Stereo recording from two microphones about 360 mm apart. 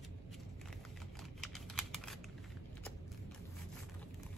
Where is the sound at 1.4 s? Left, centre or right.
Centre.